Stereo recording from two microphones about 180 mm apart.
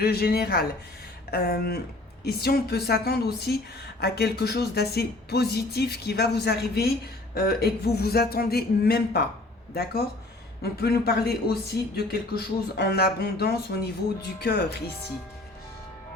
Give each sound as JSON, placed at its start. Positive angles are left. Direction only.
{"t": 0.0, "sound": "speech", "side_deg": 60}
{"t": 10.6, "sound": "speech", "side_deg": 60}